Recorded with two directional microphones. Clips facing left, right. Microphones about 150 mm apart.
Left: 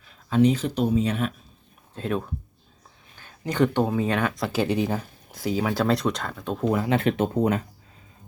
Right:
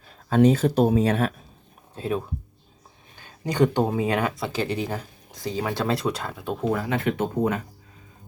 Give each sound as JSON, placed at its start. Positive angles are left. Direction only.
{"t": 0.3, "sound": "speech", "side_deg": -45}
{"t": 2.0, "sound": "speech", "side_deg": -5}
{"t": 4.4, "sound": "speech", "side_deg": 10}
{"t": 6.7, "sound": "speech", "side_deg": 30}